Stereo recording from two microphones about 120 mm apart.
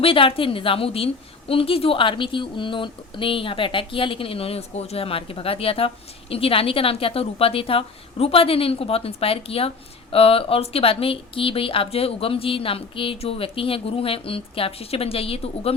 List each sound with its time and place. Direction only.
0.0 s a woman's voice: 50° left (ahead or behind)